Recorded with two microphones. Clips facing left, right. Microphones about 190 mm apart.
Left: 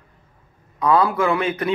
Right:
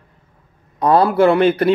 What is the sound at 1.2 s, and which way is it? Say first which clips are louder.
Speech: right 8 dB; 65° right (ahead or behind).